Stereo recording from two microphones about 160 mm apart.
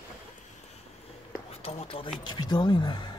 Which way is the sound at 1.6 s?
40° left (ahead or behind).